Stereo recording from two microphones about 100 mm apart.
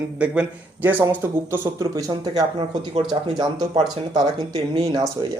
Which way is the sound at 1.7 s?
40° right (ahead or behind).